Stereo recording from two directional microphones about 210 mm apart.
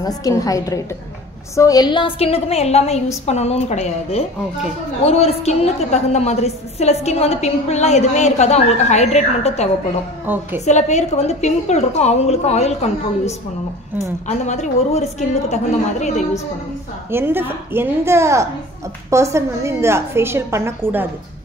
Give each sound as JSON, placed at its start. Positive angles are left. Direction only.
{"t": 0.0, "sound": "a woman's voice", "side_deg": 15}
{"t": 10.2, "sound": "a woman's voice", "side_deg": -10}
{"t": 10.6, "sound": "a woman's voice", "side_deg": 35}
{"t": 17.1, "sound": "a woman's voice", "side_deg": -10}